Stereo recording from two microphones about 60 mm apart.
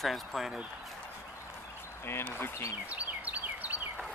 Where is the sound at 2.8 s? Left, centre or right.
Right.